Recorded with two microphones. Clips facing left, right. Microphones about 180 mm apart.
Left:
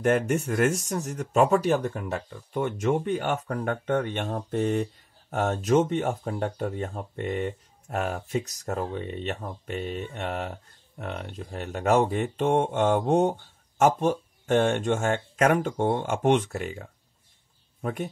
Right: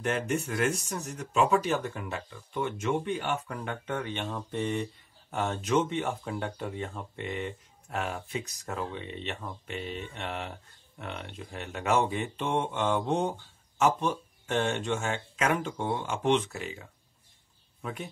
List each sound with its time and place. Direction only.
0.0 s speech: 50° left (ahead or behind)
17.8 s speech: 50° left (ahead or behind)